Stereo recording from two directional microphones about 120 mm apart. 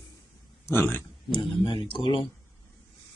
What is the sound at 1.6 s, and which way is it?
Speech, 45° left (ahead or behind).